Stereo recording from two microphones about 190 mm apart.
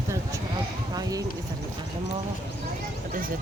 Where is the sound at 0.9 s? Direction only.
20° right (ahead or behind).